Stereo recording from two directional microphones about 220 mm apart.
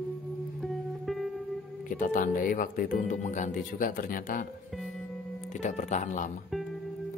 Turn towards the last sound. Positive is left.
turn(degrees=35)  # may be behind; listen again after turning